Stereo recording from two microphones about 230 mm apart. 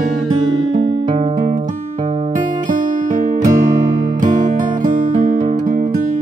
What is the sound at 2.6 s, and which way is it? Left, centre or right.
Music, right.